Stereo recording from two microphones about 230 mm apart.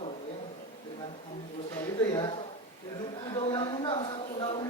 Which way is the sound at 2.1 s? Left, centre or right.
Centre.